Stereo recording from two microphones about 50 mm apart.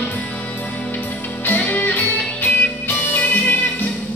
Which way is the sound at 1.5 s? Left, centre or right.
Left.